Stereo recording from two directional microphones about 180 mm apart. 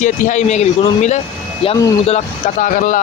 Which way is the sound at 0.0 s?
40° left (ahead or behind).